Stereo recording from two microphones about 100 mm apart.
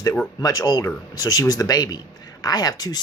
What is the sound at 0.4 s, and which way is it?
Speech, 40° left (ahead or behind).